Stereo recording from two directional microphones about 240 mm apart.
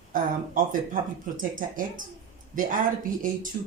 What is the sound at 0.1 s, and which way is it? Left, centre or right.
Speech, right.